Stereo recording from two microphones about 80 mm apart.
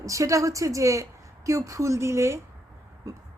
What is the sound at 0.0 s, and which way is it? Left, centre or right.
A woman's voice, right.